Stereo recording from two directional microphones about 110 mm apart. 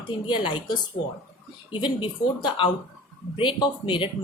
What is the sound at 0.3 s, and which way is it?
Speech, 45° left (ahead or behind).